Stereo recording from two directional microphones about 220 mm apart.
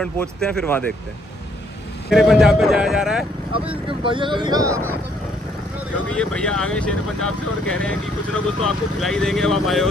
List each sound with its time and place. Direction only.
0.0 s speech: 5° left (ahead or behind)
2.0 s speech: centre (ahead or behind)
3.5 s speech: 25° right (ahead or behind)
6.0 s speech: 5° left (ahead or behind)